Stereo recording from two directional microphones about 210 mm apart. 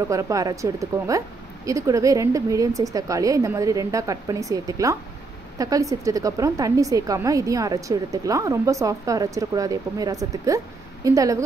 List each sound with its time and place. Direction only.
0.1 s a woman's voice: 15° right (ahead or behind)